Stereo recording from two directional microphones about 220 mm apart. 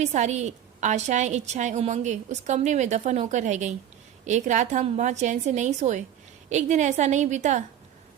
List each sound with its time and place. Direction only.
0.0 s a woman's voice: 30° right (ahead or behind)